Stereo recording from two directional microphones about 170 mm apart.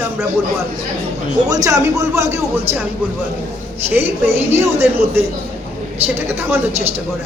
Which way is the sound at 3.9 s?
15° right (ahead or behind).